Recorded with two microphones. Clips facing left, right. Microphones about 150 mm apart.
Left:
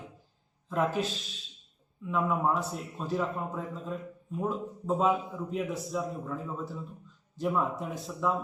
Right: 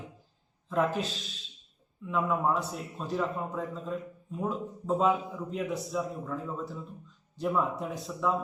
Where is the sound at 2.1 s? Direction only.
Centre (ahead or behind).